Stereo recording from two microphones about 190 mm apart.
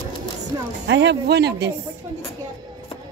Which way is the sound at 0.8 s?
65° right (ahead or behind).